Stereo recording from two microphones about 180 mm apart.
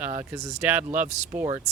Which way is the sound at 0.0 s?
10° right (ahead or behind).